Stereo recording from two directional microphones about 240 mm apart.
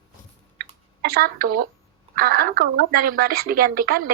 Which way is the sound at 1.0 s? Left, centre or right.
Right.